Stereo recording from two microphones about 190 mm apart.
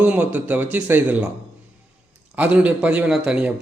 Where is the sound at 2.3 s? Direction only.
5° right (ahead or behind).